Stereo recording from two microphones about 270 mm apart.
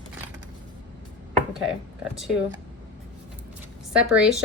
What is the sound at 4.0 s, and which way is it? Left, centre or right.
Speech, centre.